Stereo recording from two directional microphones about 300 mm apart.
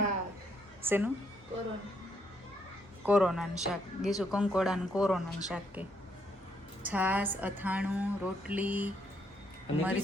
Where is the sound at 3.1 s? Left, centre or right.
Centre.